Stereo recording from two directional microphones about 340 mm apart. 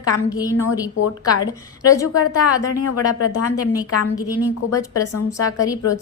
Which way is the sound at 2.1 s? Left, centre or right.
Left.